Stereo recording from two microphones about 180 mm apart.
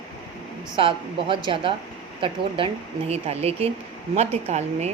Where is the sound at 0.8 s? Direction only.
30° right (ahead or behind).